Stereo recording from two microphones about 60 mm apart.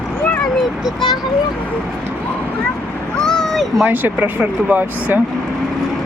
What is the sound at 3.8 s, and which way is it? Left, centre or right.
Speech, right.